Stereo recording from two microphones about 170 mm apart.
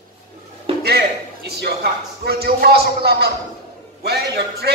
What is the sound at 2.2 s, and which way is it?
A man's voice, 65° right (ahead or behind).